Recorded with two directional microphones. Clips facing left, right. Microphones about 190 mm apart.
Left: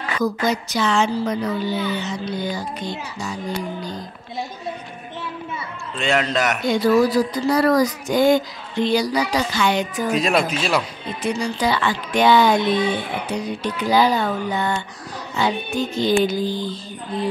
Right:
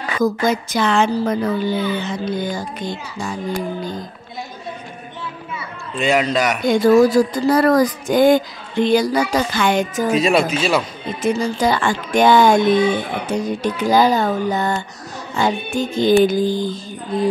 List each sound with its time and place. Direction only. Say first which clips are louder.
0.2 s speech: right 4 dB; 50° right (ahead or behind)
5.9 s a man's voice: right 3 dB; 10° right (ahead or behind)
6.6 s speech: right 5 dB; 50° right (ahead or behind)
10.1 s a man's voice: right 3 dB; 5° right (ahead or behind)
11.5 s speech: right 3 dB; 45° right (ahead or behind)